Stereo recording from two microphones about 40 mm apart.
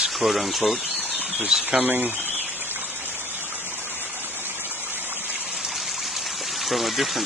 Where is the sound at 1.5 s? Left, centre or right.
Centre.